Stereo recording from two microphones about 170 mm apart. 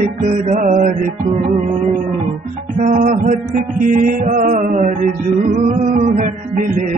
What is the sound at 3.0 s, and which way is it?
Music, 50° right (ahead or behind).